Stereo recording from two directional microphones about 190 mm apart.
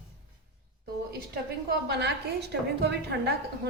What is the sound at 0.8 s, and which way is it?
A woman's voice, 55° right (ahead or behind).